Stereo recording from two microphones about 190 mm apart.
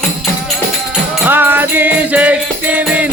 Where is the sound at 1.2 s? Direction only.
10° right (ahead or behind).